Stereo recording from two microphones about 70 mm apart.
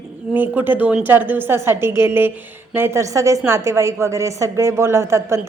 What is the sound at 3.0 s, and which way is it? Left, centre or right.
A woman's voice, right.